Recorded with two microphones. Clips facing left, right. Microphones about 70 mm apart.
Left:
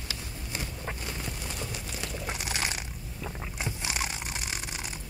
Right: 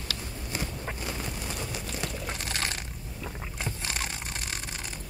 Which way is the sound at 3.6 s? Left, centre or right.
Centre.